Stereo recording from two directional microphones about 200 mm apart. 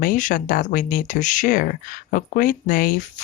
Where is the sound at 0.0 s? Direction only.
40° left (ahead or behind).